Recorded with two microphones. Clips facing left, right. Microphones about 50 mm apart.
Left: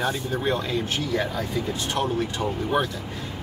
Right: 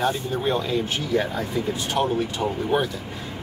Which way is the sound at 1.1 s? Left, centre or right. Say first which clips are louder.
Right 4 dB; right.